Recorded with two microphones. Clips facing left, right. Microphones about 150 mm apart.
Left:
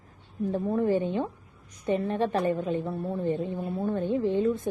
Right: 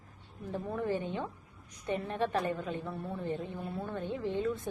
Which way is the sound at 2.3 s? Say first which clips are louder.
Left 7 dB; 25° left (ahead or behind).